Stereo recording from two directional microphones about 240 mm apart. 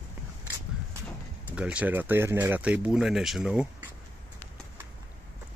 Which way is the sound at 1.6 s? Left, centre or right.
Centre.